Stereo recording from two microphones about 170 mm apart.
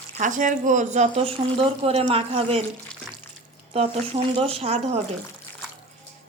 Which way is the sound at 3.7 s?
30° right (ahead or behind).